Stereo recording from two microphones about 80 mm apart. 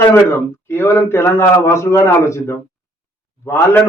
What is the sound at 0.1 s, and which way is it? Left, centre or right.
A man's voice, left.